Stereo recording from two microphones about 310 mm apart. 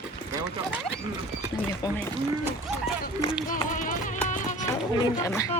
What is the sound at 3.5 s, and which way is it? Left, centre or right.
Speech, left.